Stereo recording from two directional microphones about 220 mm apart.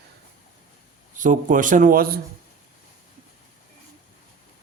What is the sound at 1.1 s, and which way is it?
Speech, 35° right (ahead or behind).